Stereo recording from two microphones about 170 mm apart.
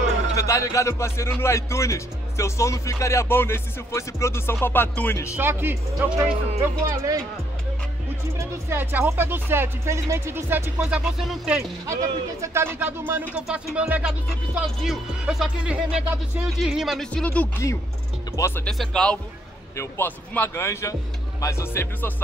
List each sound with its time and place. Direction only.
0.4 s a man's voice: 20° left (ahead or behind)
5.3 s speech: 15° right (ahead or behind)
8.4 s speech: 15° right (ahead or behind)
11.9 s a man's voice: 15° right (ahead or behind); by 22.1 s 15° left (ahead or behind)